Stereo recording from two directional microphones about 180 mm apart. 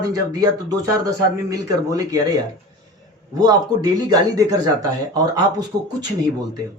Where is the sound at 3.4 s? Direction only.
20° right (ahead or behind).